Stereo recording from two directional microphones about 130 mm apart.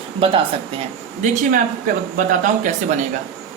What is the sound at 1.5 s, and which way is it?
Speech, 90° right.